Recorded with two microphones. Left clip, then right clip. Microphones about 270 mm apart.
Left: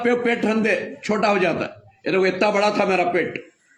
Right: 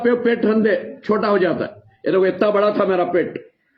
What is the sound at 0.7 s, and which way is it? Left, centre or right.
Speech, centre.